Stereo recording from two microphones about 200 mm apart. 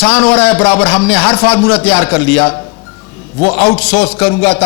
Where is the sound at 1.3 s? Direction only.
25° left (ahead or behind).